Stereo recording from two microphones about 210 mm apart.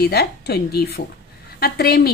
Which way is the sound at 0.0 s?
50° left (ahead or behind).